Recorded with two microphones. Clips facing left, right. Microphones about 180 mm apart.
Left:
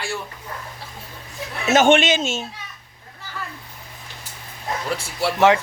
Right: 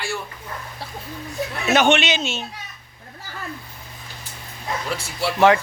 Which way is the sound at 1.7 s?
45° left (ahead or behind).